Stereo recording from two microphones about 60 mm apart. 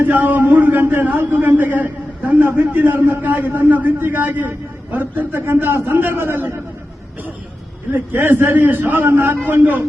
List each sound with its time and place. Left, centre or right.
0.0 s a man's voice: right
7.9 s a man's voice: right